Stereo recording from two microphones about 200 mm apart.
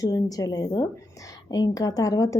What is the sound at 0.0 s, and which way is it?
A woman's voice, 20° left (ahead or behind).